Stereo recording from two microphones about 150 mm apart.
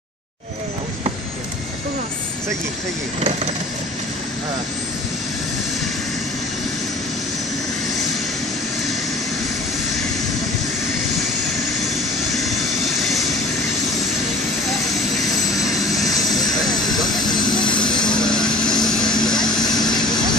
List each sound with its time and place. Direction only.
12.4 s vehicle: centre (ahead or behind)
15.6 s vehicle: centre (ahead or behind)
17.2 s vehicle: 30° left (ahead or behind)
17.8 s a sound: 5° left (ahead or behind)